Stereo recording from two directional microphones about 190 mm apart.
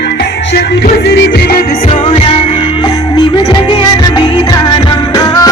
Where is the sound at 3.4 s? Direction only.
20° left (ahead or behind).